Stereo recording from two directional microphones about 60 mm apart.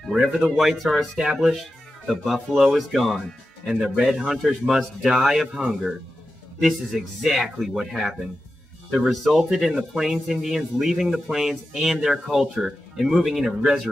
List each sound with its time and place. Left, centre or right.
0.1 s speech: centre
9.0 s speech: centre